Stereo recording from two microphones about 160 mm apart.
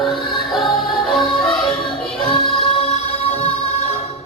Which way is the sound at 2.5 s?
35° left (ahead or behind).